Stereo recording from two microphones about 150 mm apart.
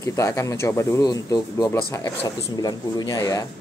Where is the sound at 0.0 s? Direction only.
20° left (ahead or behind).